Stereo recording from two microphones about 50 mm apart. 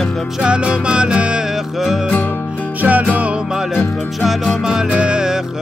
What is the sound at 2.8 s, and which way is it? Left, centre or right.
Music, right.